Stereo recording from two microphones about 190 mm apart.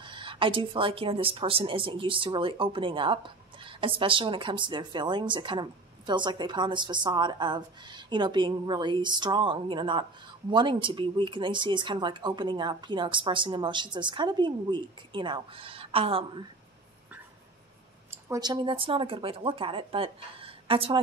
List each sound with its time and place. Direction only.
0.0 s speech: 25° right (ahead or behind)
18.1 s speech: 20° right (ahead or behind)